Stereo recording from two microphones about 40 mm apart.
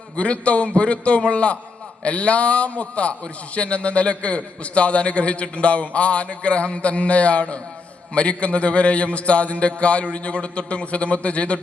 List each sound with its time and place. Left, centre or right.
0.2 s a man's voice: left